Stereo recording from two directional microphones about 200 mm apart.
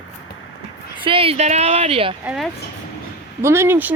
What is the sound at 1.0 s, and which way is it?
Speech, 25° right (ahead or behind).